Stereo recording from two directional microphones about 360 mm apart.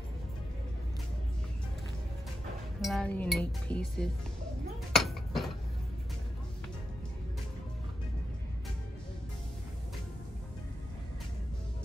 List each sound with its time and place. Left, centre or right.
2.8 s speech: centre
4.9 s dishes: centre